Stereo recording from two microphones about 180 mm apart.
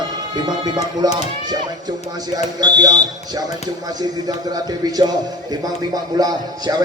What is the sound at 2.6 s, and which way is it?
A man's voice, 20° right (ahead or behind).